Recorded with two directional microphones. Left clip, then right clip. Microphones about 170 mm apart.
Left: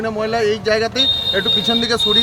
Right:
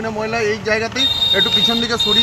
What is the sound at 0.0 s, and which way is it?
Speech, 35° left (ahead or behind).